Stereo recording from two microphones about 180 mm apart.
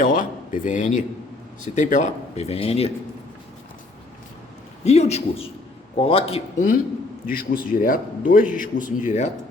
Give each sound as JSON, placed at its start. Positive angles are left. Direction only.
{"t": 0.0, "sound": "speech", "side_deg": 45}
{"t": 4.8, "sound": "speech", "side_deg": 35}
{"t": 7.3, "sound": "speech", "side_deg": 55}